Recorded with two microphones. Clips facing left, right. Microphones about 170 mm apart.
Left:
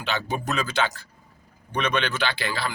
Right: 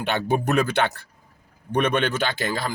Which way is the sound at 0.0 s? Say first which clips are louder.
Right 5 dB; 55° right (ahead or behind).